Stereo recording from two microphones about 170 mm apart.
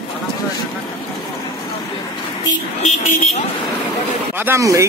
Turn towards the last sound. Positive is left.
turn(degrees=-15)  # may be behind; listen again after turning